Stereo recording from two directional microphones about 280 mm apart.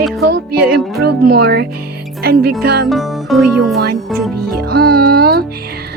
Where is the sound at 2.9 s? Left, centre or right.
Centre.